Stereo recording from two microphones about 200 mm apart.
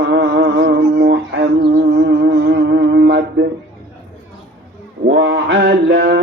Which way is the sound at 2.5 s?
60° right (ahead or behind).